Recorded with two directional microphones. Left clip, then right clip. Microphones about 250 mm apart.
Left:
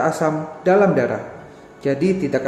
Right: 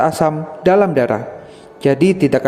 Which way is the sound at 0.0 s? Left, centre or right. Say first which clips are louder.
Right 4 dB; right.